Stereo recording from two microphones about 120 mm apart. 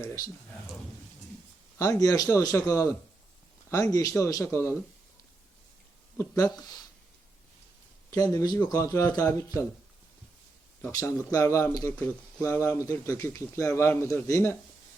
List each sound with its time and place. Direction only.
0.0 s speech: 25° left (ahead or behind)
1.8 s speech: 30° left (ahead or behind)
6.1 s speech: 30° left (ahead or behind)
8.1 s speech: 30° left (ahead or behind)
10.9 s speech: 25° left (ahead or behind)